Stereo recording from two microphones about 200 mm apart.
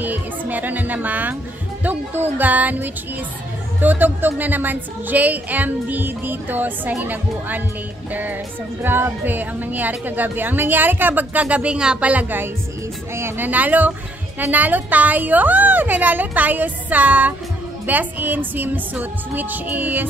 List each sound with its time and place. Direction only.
0.0 s a woman's voice: 10° right (ahead or behind)